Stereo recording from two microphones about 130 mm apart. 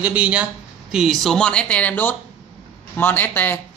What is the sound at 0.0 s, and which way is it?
Speech, 10° right (ahead or behind).